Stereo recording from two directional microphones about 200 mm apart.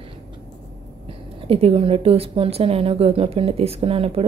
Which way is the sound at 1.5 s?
30° right (ahead or behind).